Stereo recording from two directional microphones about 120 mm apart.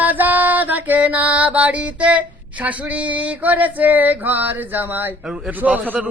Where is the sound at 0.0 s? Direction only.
15° right (ahead or behind).